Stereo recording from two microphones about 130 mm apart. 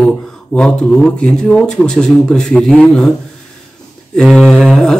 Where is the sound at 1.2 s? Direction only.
5° left (ahead or behind).